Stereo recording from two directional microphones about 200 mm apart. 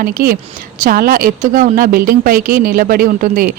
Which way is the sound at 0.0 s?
45° right (ahead or behind).